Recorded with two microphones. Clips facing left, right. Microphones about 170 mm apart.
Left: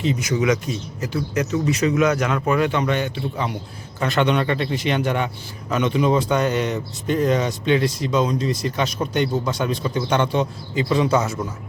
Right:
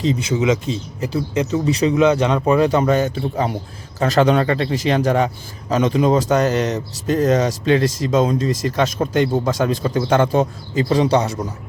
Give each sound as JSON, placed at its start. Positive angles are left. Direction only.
{"t": 0.0, "sound": "a man's voice", "side_deg": -30}